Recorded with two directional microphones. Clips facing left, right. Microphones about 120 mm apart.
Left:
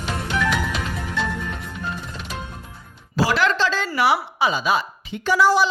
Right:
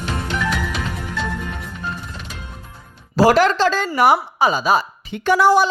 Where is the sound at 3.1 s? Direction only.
45° right (ahead or behind).